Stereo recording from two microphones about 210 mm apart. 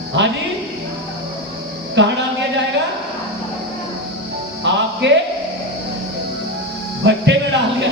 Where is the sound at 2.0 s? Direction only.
60° right (ahead or behind).